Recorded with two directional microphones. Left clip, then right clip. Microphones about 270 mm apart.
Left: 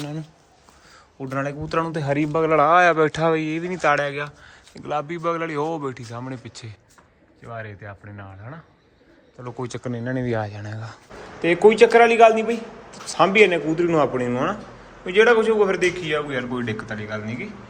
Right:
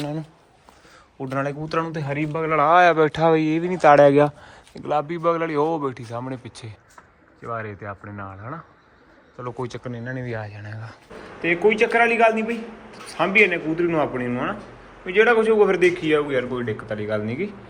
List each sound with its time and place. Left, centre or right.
0.0 s a man's voice: centre
9.8 s a man's voice: centre
17.0 s speech: centre